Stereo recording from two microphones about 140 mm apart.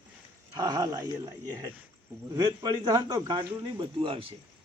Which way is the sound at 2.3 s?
30° right (ahead or behind).